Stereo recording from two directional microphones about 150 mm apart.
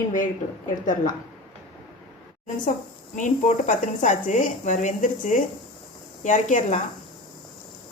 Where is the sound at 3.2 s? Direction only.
55° left (ahead or behind).